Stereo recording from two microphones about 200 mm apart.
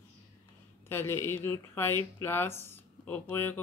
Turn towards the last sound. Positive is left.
turn(degrees=10)  # may be behind; listen again after turning